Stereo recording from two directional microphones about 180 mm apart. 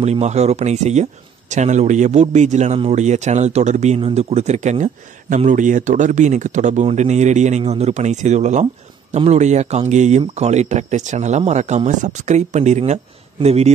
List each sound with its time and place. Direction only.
0.0 s a man's voice: 35° right (ahead or behind)